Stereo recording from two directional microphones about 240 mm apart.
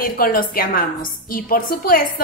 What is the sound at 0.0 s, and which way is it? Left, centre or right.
A woman's voice, left.